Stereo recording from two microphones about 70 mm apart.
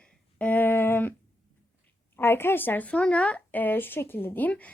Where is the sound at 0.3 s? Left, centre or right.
Left.